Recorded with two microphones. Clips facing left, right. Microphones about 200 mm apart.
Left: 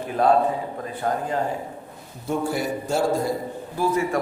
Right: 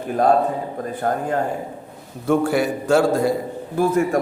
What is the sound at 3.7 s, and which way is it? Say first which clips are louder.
Speech: right 5 dB; 50° right (ahead or behind).